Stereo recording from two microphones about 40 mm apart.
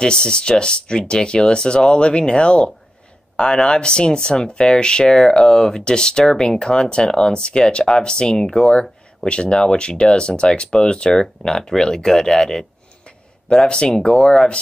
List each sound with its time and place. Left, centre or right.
0.0 s speech: left